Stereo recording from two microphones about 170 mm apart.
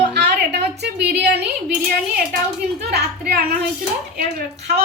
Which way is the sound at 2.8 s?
70° right (ahead or behind).